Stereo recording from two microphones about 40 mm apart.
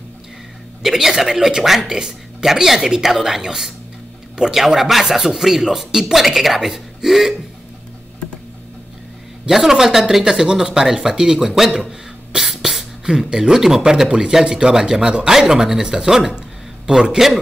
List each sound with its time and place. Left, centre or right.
0.8 s speech: centre
7.1 s a sound: centre
9.5 s speech: centre
11.7 s a sound: right
12.4 s beatboxing: centre
13.3 s speech: centre